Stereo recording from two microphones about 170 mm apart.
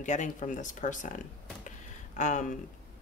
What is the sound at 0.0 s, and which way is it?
Speech, 45° left (ahead or behind).